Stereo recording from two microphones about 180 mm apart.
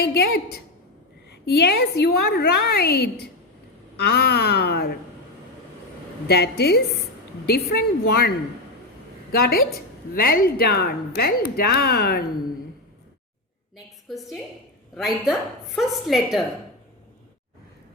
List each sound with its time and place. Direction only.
0.0 s a woman's voice: 60° left (ahead or behind)
6.2 s a woman's voice: 65° left (ahead or behind)
9.4 s a woman's voice: 60° left (ahead or behind)
14.1 s a woman's voice: centre (ahead or behind)